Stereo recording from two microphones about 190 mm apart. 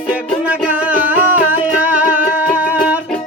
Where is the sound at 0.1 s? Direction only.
5° right (ahead or behind).